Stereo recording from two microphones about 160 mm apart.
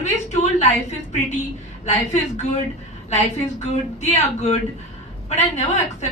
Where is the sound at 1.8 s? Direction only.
45° left (ahead or behind).